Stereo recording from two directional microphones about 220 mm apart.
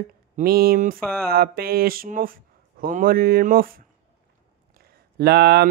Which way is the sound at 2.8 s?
40° right (ahead or behind).